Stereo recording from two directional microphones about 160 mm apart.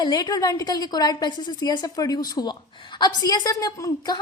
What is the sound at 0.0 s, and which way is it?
A woman's voice, 25° left (ahead or behind).